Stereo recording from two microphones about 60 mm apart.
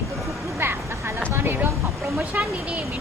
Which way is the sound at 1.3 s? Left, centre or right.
Right.